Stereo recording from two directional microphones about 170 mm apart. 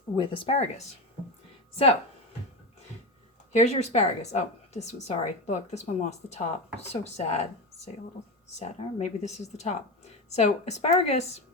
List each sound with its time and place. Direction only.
0.2 s a woman's voice: 30° left (ahead or behind)
3.5 s a woman's voice: 40° left (ahead or behind)
8.5 s a woman's voice: 40° left (ahead or behind)